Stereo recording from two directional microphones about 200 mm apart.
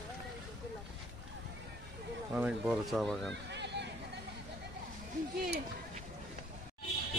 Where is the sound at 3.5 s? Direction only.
60° right (ahead or behind).